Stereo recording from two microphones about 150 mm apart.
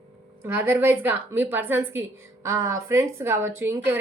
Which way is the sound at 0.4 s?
15° right (ahead or behind).